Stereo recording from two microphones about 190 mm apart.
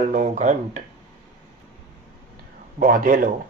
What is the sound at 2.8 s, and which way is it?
Speech, 45° right (ahead or behind).